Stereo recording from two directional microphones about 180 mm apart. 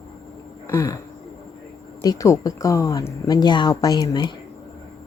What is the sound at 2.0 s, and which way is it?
Speech, 20° left (ahead or behind).